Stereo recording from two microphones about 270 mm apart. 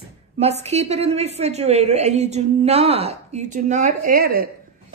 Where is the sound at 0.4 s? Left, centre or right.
Right.